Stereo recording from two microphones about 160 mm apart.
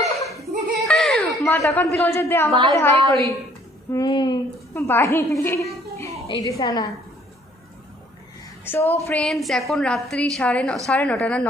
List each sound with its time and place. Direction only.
0.0 s chuckle: 20° left (ahead or behind)
0.7 s a sound: centre (ahead or behind)
1.5 s a man's voice: 15° left (ahead or behind)
4.7 s a woman's voice: 15° left (ahead or behind)
8.6 s a woman's voice: 15° left (ahead or behind)
9.1 s a woman's voice: 5° left (ahead or behind)